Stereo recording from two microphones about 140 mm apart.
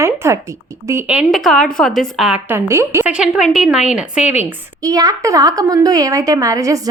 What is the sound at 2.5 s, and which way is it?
Speech, 20° right (ahead or behind).